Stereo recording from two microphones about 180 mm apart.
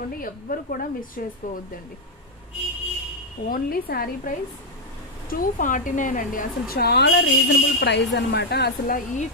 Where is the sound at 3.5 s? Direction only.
55° left (ahead or behind).